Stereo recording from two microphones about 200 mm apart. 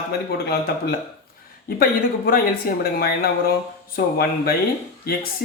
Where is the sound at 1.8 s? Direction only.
45° left (ahead or behind).